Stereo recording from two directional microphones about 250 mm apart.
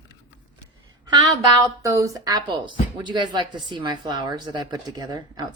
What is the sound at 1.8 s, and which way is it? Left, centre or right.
A woman's voice, centre.